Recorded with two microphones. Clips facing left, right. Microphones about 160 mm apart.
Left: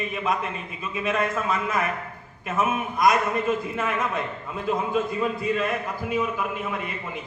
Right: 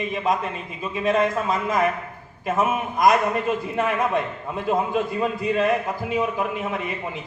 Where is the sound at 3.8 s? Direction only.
30° right (ahead or behind).